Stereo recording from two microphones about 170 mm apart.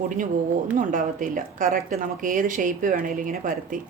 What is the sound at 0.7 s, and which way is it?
A woman's voice, 50° right (ahead or behind).